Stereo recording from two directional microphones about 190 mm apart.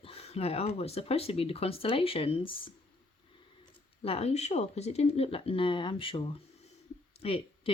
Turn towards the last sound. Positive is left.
turn(degrees=30)  # may be behind; listen again after turning